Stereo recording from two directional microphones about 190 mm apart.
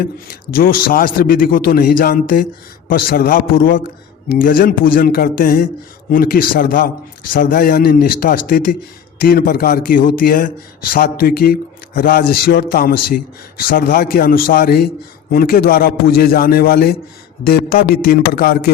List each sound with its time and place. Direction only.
0.0 s a man's voice: 50° left (ahead or behind)